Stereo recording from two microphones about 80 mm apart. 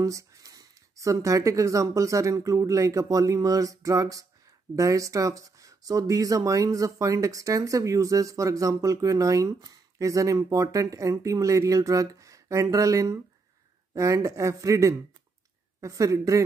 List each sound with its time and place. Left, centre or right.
0.0 s a woman's voice: right